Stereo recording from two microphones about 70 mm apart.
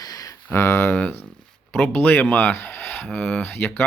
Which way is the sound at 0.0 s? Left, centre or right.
Left.